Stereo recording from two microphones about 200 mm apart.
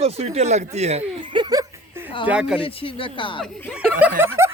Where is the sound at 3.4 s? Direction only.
5° right (ahead or behind).